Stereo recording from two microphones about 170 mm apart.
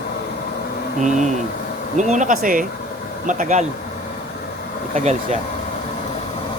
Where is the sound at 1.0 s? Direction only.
45° right (ahead or behind).